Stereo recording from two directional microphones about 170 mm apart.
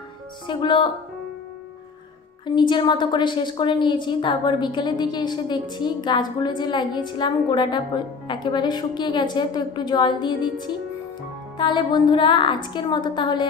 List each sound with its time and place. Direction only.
0.5 s a woman's voice: 30° left (ahead or behind)
2.4 s a woman's voice: 30° left (ahead or behind)